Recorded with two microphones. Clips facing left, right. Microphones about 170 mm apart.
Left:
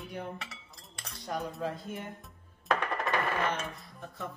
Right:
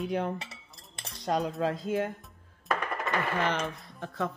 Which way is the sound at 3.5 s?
85° right.